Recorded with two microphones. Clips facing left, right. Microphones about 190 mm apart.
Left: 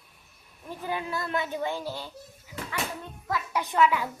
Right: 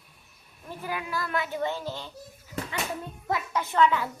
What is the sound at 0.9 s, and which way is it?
Speech, 25° left (ahead or behind).